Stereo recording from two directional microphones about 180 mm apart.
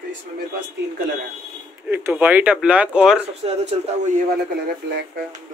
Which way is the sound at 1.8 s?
10° right (ahead or behind).